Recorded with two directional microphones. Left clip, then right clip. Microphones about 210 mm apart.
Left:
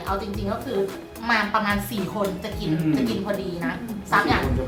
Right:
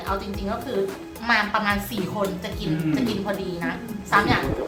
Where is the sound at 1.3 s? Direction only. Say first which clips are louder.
Right 1 dB; 15° right (ahead or behind).